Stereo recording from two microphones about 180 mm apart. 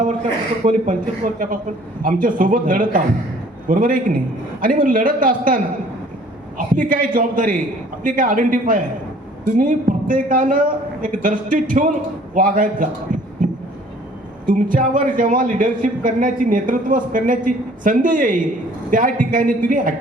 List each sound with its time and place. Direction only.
0.0 s speech: 45° right (ahead or behind)
6.7 s speech: 50° right (ahead or behind)
13.1 s heart sounds: 50° right (ahead or behind)
14.4 s speech: 50° right (ahead or behind)